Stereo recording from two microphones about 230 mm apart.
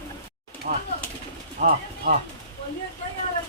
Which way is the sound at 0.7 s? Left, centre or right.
Right.